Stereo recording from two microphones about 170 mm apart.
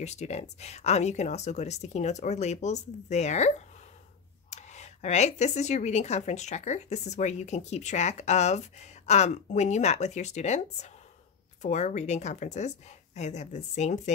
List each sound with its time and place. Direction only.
0.0 s a woman's voice: 40° left (ahead or behind)